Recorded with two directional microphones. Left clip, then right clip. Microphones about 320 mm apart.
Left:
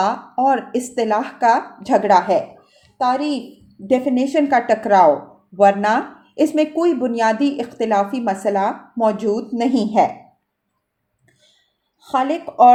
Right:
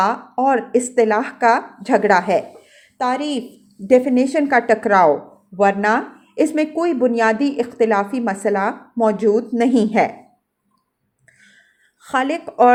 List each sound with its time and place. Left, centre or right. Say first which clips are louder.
0.0 s a woman's voice: even; centre
12.0 s speech: left 1 dB; centre